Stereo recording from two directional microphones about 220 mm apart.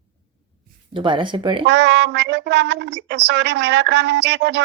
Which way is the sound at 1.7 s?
50° right (ahead or behind).